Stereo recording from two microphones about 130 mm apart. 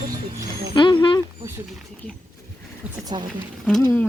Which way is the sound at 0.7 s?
35° left (ahead or behind).